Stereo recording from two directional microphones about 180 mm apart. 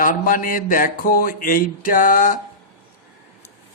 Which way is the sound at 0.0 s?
50° left (ahead or behind).